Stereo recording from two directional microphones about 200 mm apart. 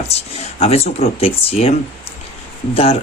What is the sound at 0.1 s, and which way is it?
Speech, 30° left (ahead or behind).